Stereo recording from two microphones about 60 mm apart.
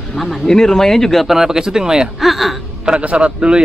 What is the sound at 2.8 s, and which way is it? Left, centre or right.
Speech, centre.